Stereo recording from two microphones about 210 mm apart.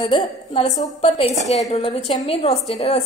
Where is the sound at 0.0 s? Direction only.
30° left (ahead or behind).